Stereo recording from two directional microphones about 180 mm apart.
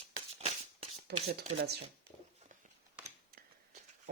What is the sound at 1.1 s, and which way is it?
Speech, 70° right (ahead or behind).